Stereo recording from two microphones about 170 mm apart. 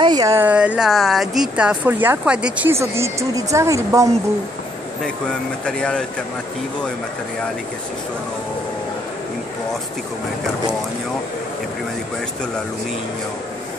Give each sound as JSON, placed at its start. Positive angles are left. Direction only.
{"t": 0.0, "sound": "speech", "side_deg": -25}
{"t": 5.7, "sound": "speech", "side_deg": 5}